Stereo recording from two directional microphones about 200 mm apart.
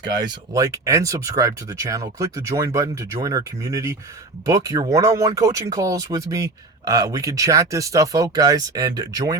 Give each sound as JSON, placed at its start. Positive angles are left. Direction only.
{"t": 0.0, "sound": "speech", "side_deg": -20}